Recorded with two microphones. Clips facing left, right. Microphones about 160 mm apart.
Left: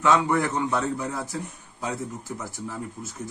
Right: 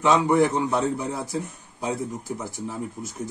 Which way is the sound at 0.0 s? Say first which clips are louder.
Right 3 dB; 20° right (ahead or behind).